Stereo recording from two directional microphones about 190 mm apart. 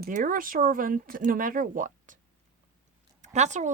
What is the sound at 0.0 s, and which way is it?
Speech, 45° right (ahead or behind).